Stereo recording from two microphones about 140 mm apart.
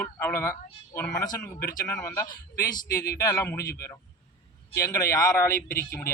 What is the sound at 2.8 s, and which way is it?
Speech, 90° left.